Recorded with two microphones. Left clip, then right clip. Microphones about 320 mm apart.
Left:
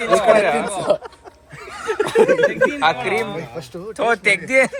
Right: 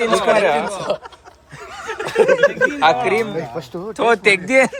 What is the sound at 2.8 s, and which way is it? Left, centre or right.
Speech, centre.